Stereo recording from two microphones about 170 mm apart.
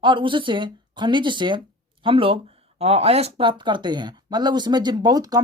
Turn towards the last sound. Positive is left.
turn(degrees=-20)  # may be behind; listen again after turning